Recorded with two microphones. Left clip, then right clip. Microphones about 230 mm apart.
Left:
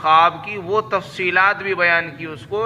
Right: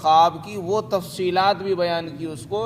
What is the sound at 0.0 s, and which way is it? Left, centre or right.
A man's voice, right.